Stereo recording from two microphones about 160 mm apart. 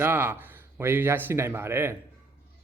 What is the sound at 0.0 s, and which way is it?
Speech, 15° right (ahead or behind).